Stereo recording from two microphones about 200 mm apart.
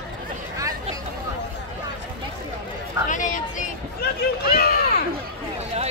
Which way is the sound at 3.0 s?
40° left (ahead or behind).